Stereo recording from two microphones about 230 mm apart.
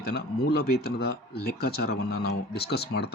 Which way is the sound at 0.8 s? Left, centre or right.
Left.